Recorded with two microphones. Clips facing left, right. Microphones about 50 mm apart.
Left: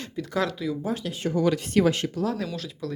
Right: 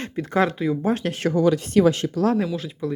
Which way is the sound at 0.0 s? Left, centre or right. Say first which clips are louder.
Right 6 dB; right.